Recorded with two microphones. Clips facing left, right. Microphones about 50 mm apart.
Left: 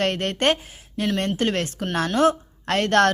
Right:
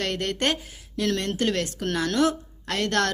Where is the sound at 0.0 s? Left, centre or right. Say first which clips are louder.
Left 4 dB; left.